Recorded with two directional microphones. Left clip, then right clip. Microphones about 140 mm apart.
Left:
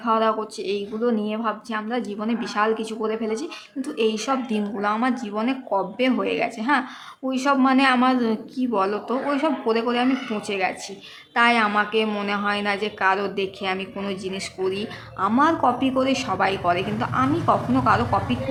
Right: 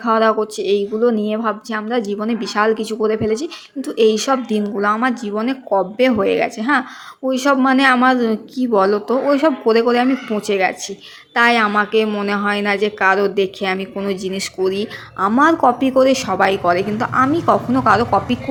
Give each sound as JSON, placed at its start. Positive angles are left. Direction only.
{"t": 0.0, "sound": "speech", "side_deg": -40}